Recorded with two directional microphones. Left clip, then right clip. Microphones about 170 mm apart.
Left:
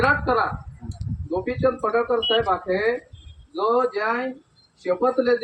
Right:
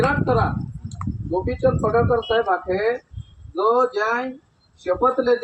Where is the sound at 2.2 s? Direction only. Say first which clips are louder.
Even; 20° right (ahead or behind).